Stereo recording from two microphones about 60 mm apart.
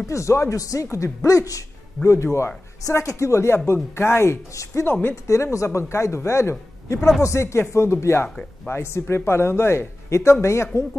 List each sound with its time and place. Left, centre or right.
0.0 s speech: left
2.0 s speech: centre
2.3 s speech: left
4.5 s speech: left